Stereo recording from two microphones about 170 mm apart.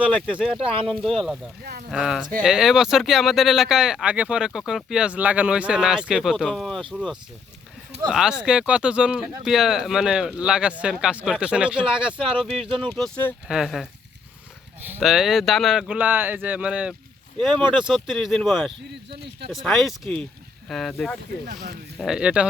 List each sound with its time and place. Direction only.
0.3 s speech: centre (ahead or behind)
0.6 s speech: 30° right (ahead or behind)
1.0 s speech: centre (ahead or behind)
12.6 s speech: 30° right (ahead or behind)
13.0 s speech: 10° left (ahead or behind)
13.5 s speech: centre (ahead or behind)
15.0 s speech: centre (ahead or behind)
17.5 s speech: 30° right (ahead or behind)
17.8 s speech: centre (ahead or behind)
21.4 s speech: 60° right (ahead or behind)
21.9 s speech: 5° right (ahead or behind)